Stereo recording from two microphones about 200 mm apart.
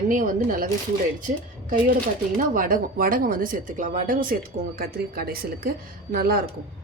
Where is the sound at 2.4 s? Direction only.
45° right (ahead or behind).